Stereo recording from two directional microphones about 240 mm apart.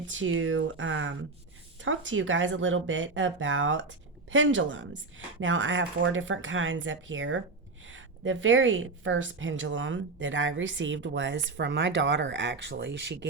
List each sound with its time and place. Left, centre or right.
0.1 s a woman's voice: right